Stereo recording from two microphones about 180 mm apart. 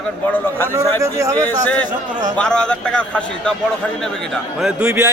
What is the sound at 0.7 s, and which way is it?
Speech, 15° right (ahead or behind).